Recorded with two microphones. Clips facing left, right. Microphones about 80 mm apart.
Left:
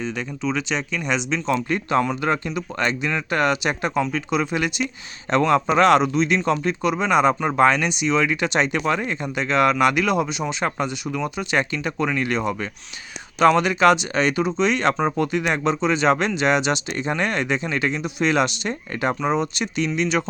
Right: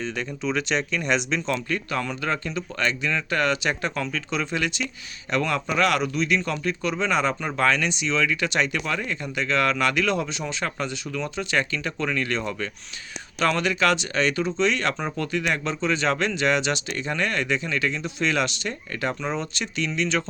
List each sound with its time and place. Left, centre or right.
0.0 s speech: centre
1.7 s speech: left
5.3 s speech: left